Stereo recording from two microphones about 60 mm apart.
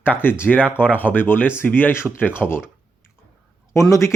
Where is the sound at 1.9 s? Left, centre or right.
Left.